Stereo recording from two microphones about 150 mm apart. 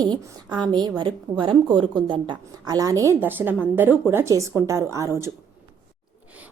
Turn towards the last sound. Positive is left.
turn(degrees=-20)  # may be behind; listen again after turning